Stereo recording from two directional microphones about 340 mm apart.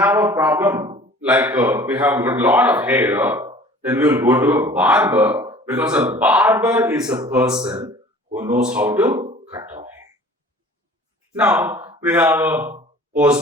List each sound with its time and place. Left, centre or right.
0.0 s a man's voice: centre
8.4 s speech: right
8.7 s speech: centre
11.3 s a man's voice: centre